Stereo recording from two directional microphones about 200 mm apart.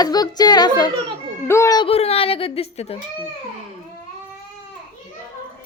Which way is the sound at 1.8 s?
30° left (ahead or behind).